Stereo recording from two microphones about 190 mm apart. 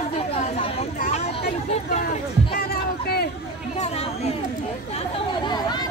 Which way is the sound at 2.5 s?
55° left (ahead or behind).